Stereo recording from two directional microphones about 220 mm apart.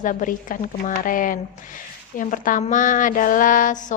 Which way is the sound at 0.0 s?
35° left (ahead or behind).